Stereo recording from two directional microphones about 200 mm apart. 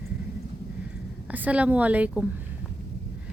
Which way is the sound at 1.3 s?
10° right (ahead or behind).